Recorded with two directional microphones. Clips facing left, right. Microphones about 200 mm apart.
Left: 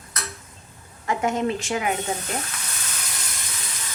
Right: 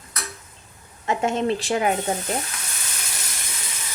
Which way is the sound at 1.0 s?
25° right (ahead or behind).